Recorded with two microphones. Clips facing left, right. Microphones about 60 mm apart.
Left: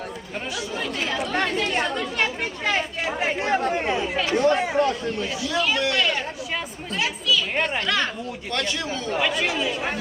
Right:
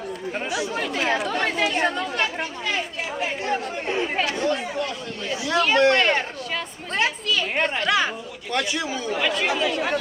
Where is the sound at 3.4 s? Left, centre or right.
Left.